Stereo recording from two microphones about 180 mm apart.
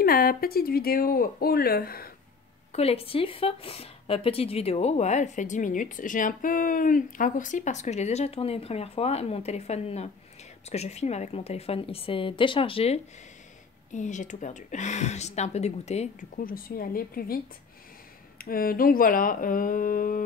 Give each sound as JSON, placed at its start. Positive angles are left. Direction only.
{"t": 0.0, "sound": "speech", "side_deg": 55}
{"t": 2.7, "sound": "a woman's voice", "side_deg": 35}
{"t": 16.4, "sound": "speech", "side_deg": 55}
{"t": 18.4, "sound": "speech", "side_deg": 55}